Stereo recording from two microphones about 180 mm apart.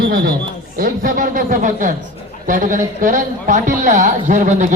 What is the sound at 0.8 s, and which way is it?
Speech, 50° right (ahead or behind).